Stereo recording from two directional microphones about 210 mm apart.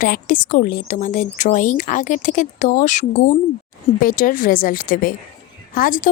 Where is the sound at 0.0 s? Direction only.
40° left (ahead or behind).